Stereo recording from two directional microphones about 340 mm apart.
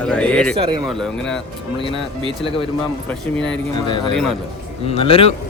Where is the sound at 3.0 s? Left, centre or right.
Centre.